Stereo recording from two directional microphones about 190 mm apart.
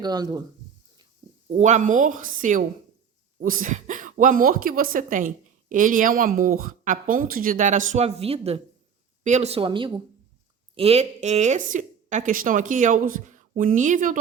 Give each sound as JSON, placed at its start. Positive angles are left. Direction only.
{"t": 0.0, "sound": "speech", "side_deg": -20}
{"t": 1.5, "sound": "speech", "side_deg": -35}